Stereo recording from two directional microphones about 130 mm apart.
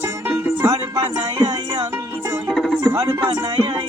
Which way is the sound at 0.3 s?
25° right (ahead or behind).